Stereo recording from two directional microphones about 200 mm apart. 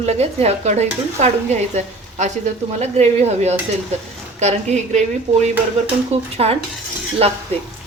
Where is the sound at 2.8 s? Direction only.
35° right (ahead or behind).